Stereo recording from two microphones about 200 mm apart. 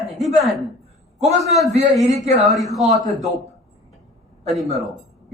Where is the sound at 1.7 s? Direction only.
35° right (ahead or behind).